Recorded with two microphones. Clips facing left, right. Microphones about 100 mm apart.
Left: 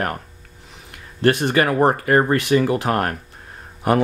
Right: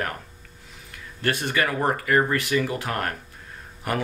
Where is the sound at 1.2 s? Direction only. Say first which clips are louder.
Left 8 dB; 25° left (ahead or behind).